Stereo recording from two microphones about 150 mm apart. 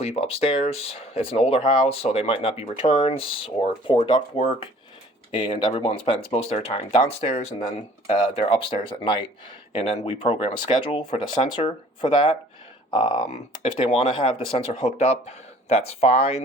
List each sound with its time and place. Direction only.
0.0 s speech: 40° left (ahead or behind)
5.5 s speech: 40° left (ahead or behind)
8.4 s speech: 35° left (ahead or behind)